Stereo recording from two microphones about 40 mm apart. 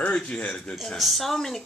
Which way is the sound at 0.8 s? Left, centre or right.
Centre.